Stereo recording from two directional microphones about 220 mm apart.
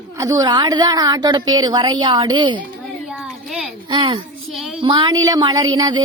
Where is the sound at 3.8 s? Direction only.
20° right (ahead or behind).